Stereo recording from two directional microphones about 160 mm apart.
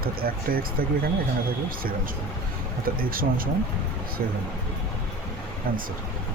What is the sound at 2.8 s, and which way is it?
Speech, 65° right (ahead or behind).